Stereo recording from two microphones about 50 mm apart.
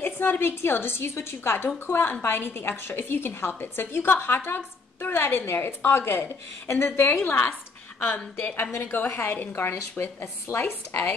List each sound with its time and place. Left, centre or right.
0.0 s a woman's voice: left
8.9 s a woman's voice: left